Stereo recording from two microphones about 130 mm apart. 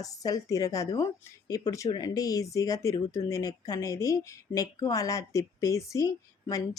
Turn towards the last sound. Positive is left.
turn(degrees=25)  # may be behind; listen again after turning